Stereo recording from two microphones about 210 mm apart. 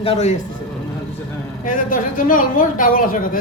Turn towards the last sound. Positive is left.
turn(degrees=40)  # may be behind; listen again after turning